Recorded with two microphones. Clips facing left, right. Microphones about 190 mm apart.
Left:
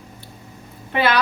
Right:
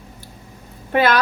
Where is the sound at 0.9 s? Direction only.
45° right (ahead or behind).